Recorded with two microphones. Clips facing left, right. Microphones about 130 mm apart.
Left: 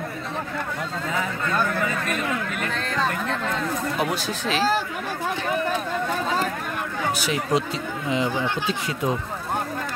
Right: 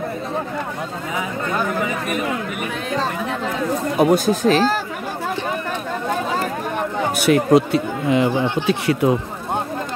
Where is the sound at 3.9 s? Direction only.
45° right (ahead or behind).